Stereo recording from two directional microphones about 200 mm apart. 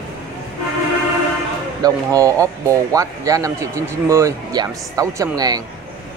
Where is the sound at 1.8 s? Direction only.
15° right (ahead or behind).